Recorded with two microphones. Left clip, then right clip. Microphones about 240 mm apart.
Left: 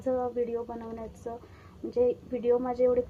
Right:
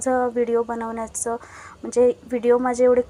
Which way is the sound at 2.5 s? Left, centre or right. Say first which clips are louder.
Right 8 dB; centre.